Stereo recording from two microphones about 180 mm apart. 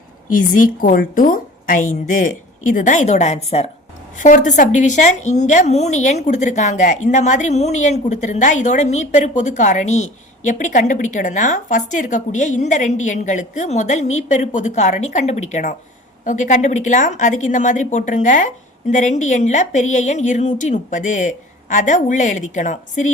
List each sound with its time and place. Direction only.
0.3 s a woman's voice: 45° left (ahead or behind)